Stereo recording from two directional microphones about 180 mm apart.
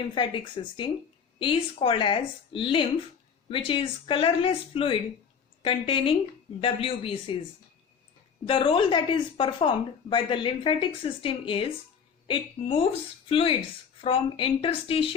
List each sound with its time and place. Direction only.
0.1 s speech: 25° left (ahead or behind)
8.4 s speech: 30° left (ahead or behind)